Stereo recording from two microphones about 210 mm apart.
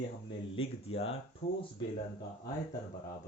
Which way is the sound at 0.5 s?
25° left (ahead or behind).